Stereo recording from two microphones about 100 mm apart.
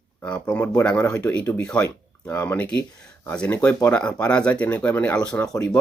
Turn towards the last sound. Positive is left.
turn(degrees=10)  # may be behind; listen again after turning